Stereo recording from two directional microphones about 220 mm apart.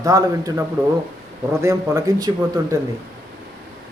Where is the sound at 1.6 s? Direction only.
15° right (ahead or behind).